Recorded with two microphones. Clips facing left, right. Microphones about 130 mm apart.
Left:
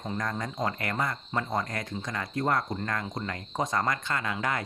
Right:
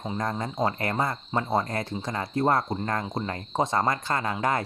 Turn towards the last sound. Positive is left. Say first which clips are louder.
# right 4 dB
turn(degrees=-35)  # may be behind; listen again after turning